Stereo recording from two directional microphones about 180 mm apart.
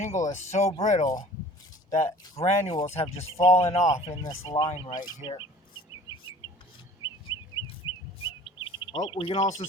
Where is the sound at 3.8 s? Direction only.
40° left (ahead or behind).